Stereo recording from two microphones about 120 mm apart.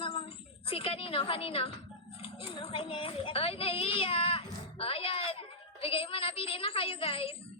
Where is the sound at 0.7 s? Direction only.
50° left (ahead or behind).